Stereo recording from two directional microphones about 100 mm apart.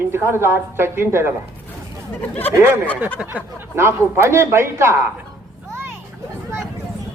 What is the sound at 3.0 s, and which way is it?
A man's voice, 15° right (ahead or behind).